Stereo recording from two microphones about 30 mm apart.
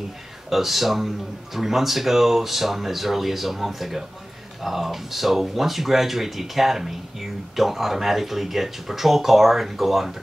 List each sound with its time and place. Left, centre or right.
0.5 s speech: centre